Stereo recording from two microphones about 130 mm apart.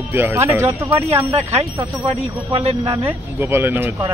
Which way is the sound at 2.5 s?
50° right (ahead or behind).